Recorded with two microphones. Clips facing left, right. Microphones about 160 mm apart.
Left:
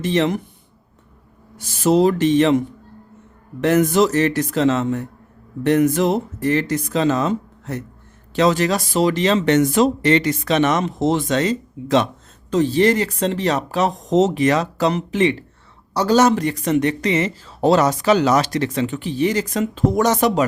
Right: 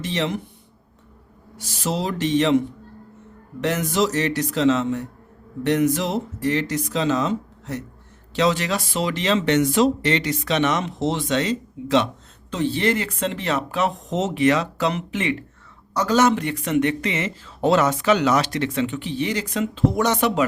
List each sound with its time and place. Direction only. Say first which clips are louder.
0.0 s speech: left 6 dB; 50° left (ahead or behind)
1.8 s speech: left 9 dB; 50° left (ahead or behind)
3.6 s speech: left 6 dB; 50° left (ahead or behind)